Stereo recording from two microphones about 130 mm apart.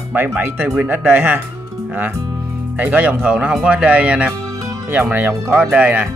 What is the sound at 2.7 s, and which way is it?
Speech, 15° right (ahead or behind).